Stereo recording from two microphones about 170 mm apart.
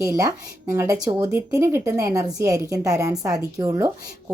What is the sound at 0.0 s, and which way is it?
Speech, 20° right (ahead or behind).